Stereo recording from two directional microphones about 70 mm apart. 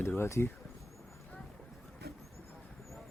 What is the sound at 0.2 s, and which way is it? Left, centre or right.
Speech, left.